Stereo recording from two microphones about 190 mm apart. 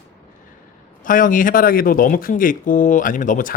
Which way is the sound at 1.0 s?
45° left (ahead or behind).